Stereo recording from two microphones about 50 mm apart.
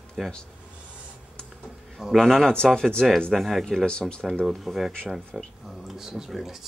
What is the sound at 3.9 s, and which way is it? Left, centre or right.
Speech, centre.